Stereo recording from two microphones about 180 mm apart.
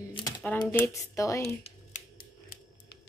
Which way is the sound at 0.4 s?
10° left (ahead or behind).